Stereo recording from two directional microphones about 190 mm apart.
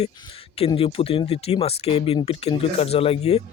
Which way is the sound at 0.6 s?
30° left (ahead or behind).